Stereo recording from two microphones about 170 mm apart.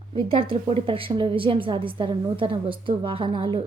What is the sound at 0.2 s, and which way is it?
Speech, 30° right (ahead or behind).